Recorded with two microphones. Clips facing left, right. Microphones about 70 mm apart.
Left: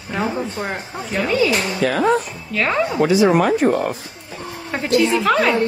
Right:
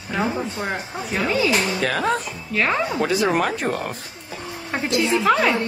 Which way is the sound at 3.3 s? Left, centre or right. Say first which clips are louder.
Left 6 dB; left.